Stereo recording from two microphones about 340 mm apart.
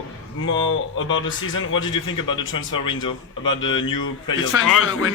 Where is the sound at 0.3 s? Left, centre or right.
Left.